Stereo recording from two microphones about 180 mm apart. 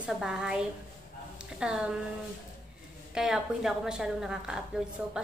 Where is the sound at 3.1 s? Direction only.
Centre (ahead or behind).